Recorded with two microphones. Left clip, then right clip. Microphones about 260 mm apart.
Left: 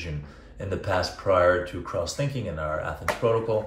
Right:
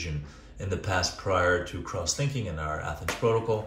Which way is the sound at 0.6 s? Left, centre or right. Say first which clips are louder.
Left 3 dB; right.